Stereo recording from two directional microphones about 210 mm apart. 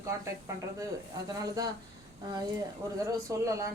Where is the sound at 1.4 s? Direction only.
15° right (ahead or behind).